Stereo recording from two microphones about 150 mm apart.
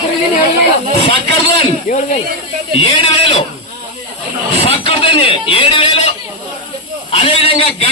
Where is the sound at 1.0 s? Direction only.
40° left (ahead or behind).